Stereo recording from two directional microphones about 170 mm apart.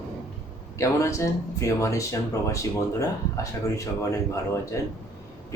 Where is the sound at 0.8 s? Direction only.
20° left (ahead or behind).